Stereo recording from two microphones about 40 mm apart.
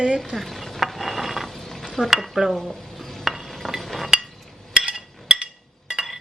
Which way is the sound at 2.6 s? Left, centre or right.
Centre.